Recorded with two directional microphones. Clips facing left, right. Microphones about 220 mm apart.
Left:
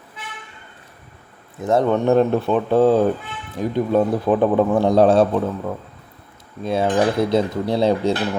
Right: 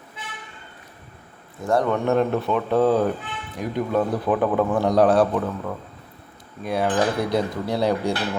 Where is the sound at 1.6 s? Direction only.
20° left (ahead or behind).